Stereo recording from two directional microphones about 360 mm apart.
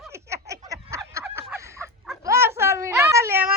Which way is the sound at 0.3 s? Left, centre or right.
Centre.